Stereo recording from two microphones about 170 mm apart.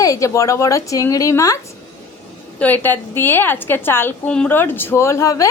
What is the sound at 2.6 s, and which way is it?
A woman's voice, 10° left (ahead or behind).